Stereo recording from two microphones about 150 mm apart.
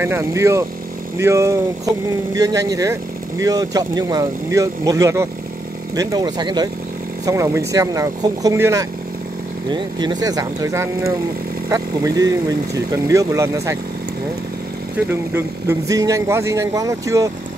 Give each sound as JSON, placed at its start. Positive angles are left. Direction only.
{"t": 0.0, "sound": "speech", "side_deg": -15}
{"t": 15.0, "sound": "speech", "side_deg": -15}